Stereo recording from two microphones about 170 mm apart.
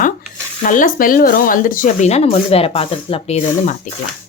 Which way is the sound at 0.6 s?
50° left (ahead or behind).